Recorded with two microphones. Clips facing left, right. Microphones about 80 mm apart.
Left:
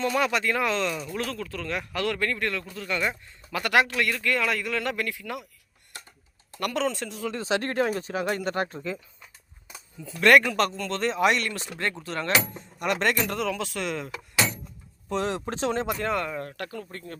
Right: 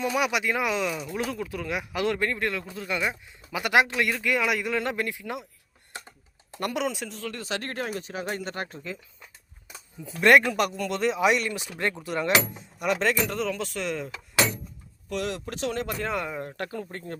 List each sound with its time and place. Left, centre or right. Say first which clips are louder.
0.0 s speech: left 1 dB; centre
6.6 s speech: left 1 dB; right
6.8 s speech: left 2 dB; centre
7.3 s speech: left 6 dB; left
10.0 s speech: even; centre
12.8 s speech: even; centre
15.1 s speech: left 3 dB; left
16.0 s speech: left 2 dB; centre
16.2 s speech: left 1 dB; centre
16.6 s speech: right 2 dB; right